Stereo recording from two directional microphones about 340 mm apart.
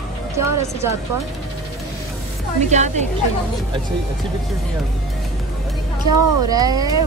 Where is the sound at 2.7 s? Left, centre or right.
Right.